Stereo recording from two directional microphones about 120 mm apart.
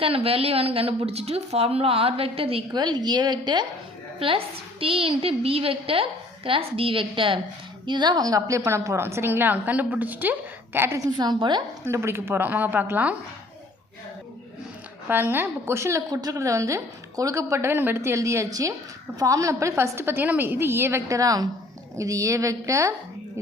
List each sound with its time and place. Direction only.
0.0 s a woman's voice: 55° right (ahead or behind)
2.7 s a woman's voice: 35° right (ahead or behind)
4.2 s a woman's voice: 50° right (ahead or behind)
11.9 s a woman's voice: 20° right (ahead or behind)
15.1 s a woman's voice: 15° right (ahead or behind)